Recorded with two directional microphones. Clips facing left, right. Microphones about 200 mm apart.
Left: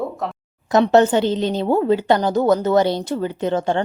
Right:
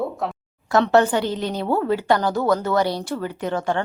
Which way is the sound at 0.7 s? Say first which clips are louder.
Left 3 dB; 20° left (ahead or behind).